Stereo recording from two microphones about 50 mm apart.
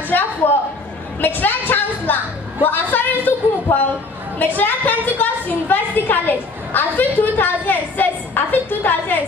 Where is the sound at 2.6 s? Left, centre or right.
Left.